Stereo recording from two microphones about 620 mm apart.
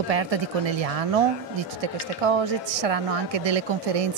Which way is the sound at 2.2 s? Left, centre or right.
Right.